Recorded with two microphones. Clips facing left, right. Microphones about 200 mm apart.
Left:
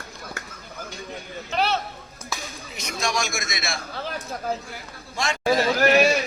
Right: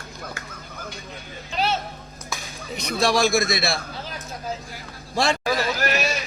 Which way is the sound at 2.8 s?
35° right (ahead or behind).